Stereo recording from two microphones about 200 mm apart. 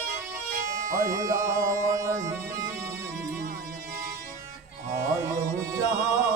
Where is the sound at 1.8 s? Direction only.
40° right (ahead or behind).